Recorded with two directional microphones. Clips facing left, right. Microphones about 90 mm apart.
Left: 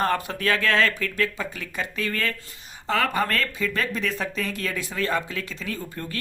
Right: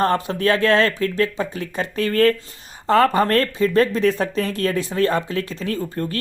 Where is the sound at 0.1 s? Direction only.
30° right (ahead or behind).